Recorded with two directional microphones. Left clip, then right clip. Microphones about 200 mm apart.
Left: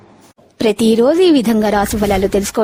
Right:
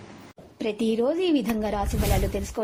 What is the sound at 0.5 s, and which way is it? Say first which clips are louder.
Speech: left 13 dB; 65° left (ahead or behind).